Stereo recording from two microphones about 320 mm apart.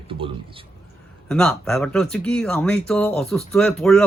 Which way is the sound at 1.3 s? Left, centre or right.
Centre.